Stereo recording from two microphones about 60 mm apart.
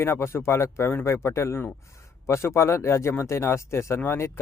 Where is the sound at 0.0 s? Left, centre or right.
Left.